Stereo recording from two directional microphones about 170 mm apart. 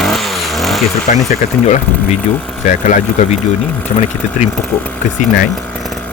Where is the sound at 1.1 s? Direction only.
50° left (ahead or behind).